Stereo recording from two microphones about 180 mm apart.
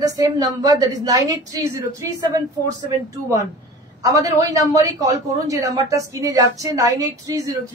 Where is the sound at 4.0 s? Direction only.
20° right (ahead or behind).